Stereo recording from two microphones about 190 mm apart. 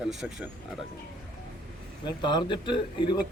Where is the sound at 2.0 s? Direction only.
25° left (ahead or behind).